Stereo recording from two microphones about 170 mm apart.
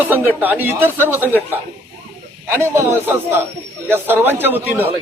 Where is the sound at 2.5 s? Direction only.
15° right (ahead or behind).